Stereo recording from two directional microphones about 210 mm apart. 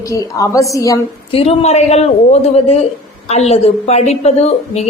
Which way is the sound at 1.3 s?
30° left (ahead or behind).